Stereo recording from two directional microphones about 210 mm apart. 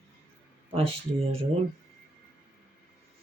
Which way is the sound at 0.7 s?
25° right (ahead or behind).